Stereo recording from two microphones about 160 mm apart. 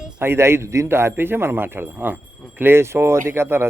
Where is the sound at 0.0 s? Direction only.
15° right (ahead or behind).